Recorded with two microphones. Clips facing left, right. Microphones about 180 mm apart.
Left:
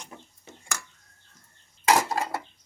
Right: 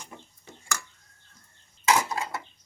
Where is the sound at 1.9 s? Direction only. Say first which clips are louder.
Left 2 dB; 40° left (ahead or behind).